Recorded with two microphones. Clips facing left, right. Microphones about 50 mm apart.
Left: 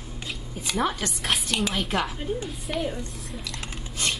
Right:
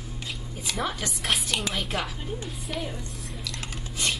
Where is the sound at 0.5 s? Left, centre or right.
Centre.